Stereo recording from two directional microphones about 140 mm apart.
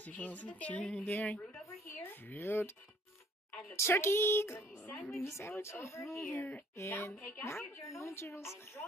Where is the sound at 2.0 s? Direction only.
15° left (ahead or behind).